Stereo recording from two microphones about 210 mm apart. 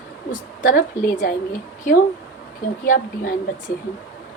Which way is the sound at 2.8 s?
40° left (ahead or behind).